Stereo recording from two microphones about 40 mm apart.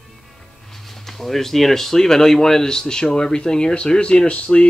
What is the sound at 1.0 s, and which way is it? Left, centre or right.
Speech, centre.